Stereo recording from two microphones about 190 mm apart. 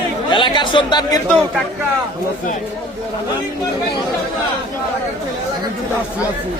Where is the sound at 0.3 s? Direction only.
25° left (ahead or behind).